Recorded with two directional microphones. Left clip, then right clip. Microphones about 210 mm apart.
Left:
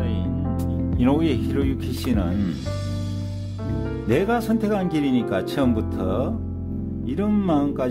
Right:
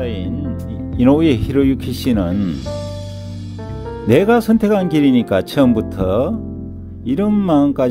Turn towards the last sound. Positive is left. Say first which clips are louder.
# right 7 dB
turn(degrees=-35)  # may be behind; listen again after turning